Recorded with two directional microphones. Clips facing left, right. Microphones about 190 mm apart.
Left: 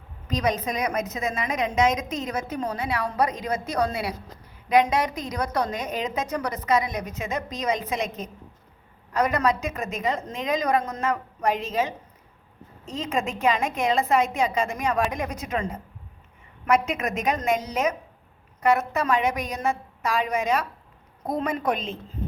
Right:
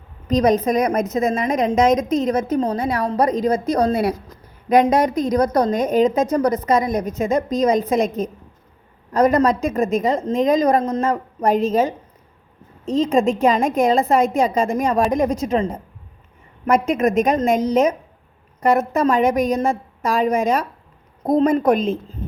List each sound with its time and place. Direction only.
0.3 s a woman's voice: 45° right (ahead or behind)
10.8 s a woman's voice: 30° right (ahead or behind)
12.8 s a woman's voice: 35° right (ahead or behind)
16.6 s a woman's voice: 45° right (ahead or behind)
18.6 s a woman's voice: 40° right (ahead or behind)